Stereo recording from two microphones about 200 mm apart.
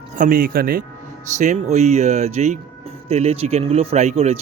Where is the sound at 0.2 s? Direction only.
45° right (ahead or behind).